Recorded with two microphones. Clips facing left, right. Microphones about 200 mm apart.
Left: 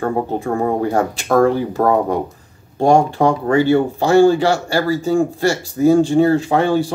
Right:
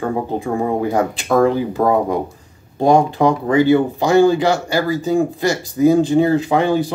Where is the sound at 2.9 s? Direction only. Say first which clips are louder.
Even; 20° right (ahead or behind).